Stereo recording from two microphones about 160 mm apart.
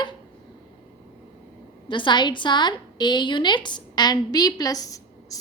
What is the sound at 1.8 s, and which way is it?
A woman's voice, 30° left (ahead or behind).